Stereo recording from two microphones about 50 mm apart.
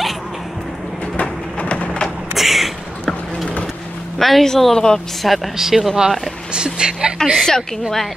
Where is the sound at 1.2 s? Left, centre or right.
Left.